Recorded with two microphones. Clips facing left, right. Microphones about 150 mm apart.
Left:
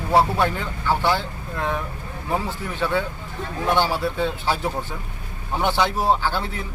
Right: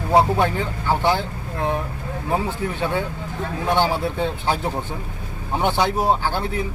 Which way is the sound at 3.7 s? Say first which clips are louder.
Right 2 dB; 20° right (ahead or behind).